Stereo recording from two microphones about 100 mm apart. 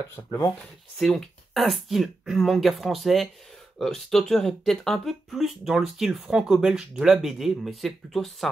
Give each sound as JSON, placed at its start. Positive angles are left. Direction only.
{"t": 0.1, "sound": "speech", "side_deg": 25}
{"t": 0.9, "sound": "speech", "side_deg": 5}